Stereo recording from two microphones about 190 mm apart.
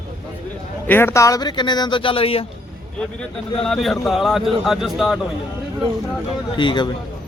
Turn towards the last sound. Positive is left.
turn(degrees=25)  # may be behind; listen again after turning